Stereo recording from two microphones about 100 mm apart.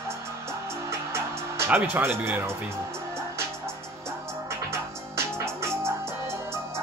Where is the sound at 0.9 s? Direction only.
25° right (ahead or behind).